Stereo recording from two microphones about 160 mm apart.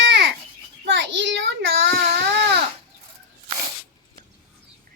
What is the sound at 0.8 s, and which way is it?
Child singing, 90° right.